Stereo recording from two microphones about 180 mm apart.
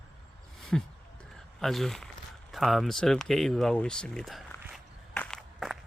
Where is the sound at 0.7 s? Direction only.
Centre (ahead or behind).